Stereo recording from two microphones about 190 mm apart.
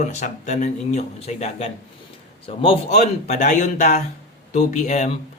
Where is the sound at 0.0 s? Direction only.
35° left (ahead or behind).